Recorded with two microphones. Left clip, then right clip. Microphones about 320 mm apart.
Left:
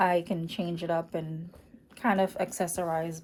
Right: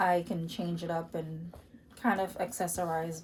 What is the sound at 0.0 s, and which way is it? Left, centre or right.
A woman's voice, left.